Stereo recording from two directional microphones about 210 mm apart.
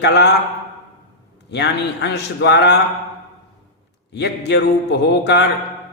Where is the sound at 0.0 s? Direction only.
55° left (ahead or behind).